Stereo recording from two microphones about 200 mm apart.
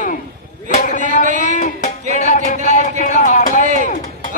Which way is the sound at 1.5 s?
40° left (ahead or behind).